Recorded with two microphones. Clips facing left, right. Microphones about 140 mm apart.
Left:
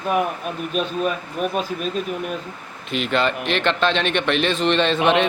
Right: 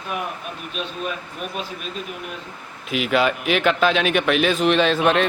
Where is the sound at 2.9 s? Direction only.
5° right (ahead or behind).